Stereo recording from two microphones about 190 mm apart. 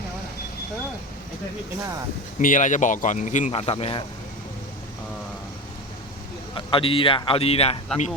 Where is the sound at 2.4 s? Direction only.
45° left (ahead or behind).